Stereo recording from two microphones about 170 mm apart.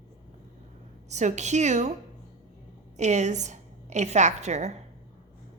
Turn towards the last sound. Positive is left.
turn(degrees=-40)  # may be behind; listen again after turning